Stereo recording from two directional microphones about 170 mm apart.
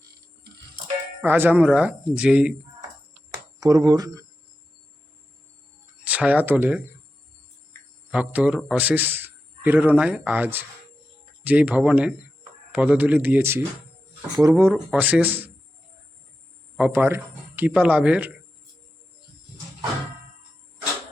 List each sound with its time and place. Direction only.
1.2 s a man's voice: 10° right (ahead or behind)
3.6 s speech: 20° right (ahead or behind)
6.1 s speech: 10° right (ahead or behind)
8.1 s a man's voice: 5° right (ahead or behind)
16.7 s a man's voice: 10° right (ahead or behind)